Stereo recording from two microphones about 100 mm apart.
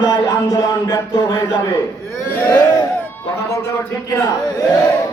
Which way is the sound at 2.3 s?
25° left (ahead or behind).